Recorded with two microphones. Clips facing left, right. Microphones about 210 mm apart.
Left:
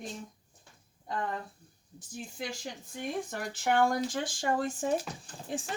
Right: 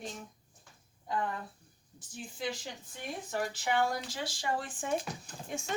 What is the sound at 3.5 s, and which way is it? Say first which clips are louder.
Speech: left 6 dB; 50° left (ahead or behind).